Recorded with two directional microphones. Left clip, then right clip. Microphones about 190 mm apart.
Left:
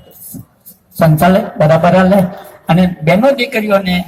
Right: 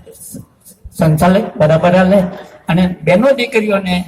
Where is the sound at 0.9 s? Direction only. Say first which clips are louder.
Left 2 dB; 45° left (ahead or behind).